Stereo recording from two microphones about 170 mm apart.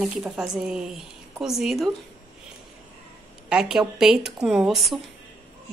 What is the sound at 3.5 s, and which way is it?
Speech, 5° right (ahead or behind).